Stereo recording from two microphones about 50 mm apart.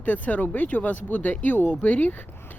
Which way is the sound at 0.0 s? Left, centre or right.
Left.